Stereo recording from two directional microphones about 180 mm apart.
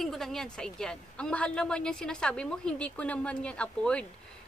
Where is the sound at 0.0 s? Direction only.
Centre (ahead or behind).